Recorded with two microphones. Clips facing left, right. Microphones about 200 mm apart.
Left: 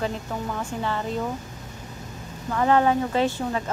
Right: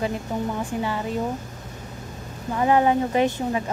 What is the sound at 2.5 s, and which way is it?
Speech, 15° right (ahead or behind).